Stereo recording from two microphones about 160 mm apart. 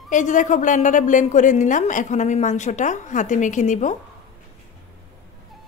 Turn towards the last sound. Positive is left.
turn(degrees=50)  # may be behind; listen again after turning